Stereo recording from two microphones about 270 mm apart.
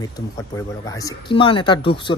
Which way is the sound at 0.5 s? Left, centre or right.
Centre.